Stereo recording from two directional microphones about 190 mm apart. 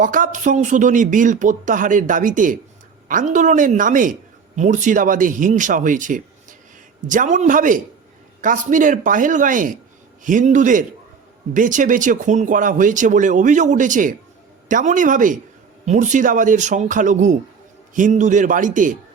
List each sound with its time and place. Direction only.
0.0 s speech: 45° right (ahead or behind)